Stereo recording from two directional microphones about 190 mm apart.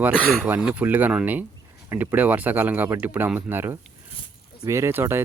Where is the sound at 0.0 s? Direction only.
5° right (ahead or behind).